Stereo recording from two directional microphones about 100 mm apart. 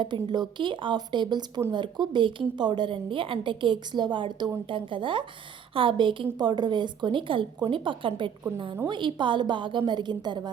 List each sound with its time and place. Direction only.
0.0 s a woman's voice: 50° right (ahead or behind)
6.3 s a woman's voice: 45° right (ahead or behind)